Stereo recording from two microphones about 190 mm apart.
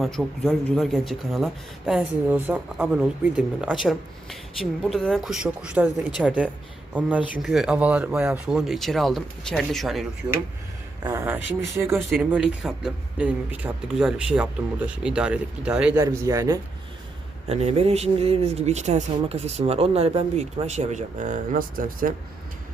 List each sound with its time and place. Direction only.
0.0 s speech: centre (ahead or behind)
11.0 s speech: 15° right (ahead or behind)
16.0 s speech: 15° right (ahead or behind)
17.5 s speech: 35° right (ahead or behind)